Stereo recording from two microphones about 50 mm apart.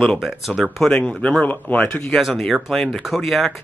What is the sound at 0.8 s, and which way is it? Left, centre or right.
Speech, centre.